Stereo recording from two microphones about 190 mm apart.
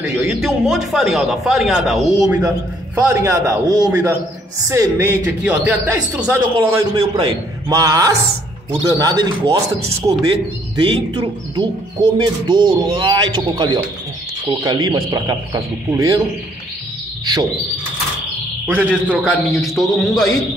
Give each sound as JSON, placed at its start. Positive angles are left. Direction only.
{"t": 0.0, "sound": "speech", "side_deg": -5}
{"t": 3.0, "sound": "a man's voice", "side_deg": -15}
{"t": 10.8, "sound": "speech", "side_deg": -25}
{"t": 17.2, "sound": "bird", "side_deg": -20}
{"t": 18.7, "sound": "speech", "side_deg": -10}